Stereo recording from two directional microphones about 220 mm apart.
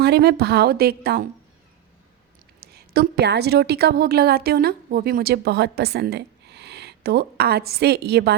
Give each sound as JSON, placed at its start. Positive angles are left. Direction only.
{"t": 0.0, "sound": "a woman's voice", "side_deg": -45}
{"t": 2.6, "sound": "a woman's voice", "side_deg": -45}